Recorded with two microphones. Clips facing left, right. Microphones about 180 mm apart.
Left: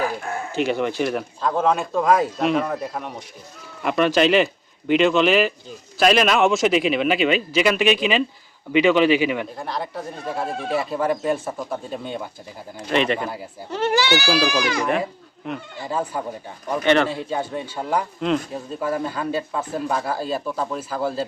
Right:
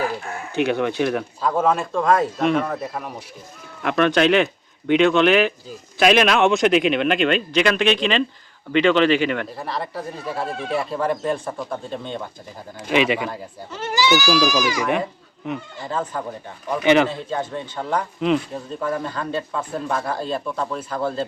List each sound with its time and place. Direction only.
0.6 s speech: centre (ahead or behind)
12.9 s speech: 5° right (ahead or behind)
13.7 s speech: 60° left (ahead or behind)
15.9 s speech: 10° left (ahead or behind)
16.8 s speech: 10° right (ahead or behind)
17.1 s speech: 10° left (ahead or behind)
18.2 s speech: 5° right (ahead or behind)
18.5 s speech: 5° left (ahead or behind)